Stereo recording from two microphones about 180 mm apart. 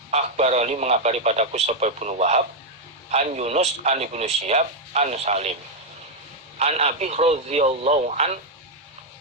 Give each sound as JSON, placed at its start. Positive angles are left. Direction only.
{"t": 0.1, "sound": "speech", "side_deg": -40}
{"t": 6.6, "sound": "speech", "side_deg": -35}